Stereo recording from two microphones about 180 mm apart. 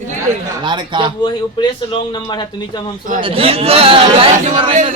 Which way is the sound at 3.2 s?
30° right (ahead or behind).